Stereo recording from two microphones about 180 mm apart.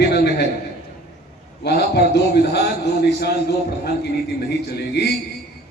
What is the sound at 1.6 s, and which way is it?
A man's voice, 65° left (ahead or behind).